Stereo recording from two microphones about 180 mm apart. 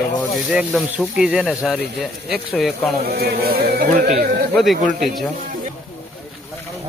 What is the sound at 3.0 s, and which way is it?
Speech, 60° right (ahead or behind).